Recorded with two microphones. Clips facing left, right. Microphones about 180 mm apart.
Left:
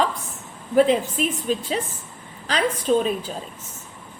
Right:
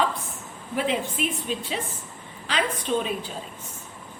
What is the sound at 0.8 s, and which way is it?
A woman's voice, 40° left (ahead or behind).